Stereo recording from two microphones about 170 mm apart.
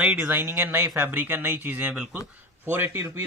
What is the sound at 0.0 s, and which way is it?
A man's voice, 10° right (ahead or behind).